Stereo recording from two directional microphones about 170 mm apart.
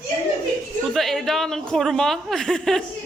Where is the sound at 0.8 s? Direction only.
Centre (ahead or behind).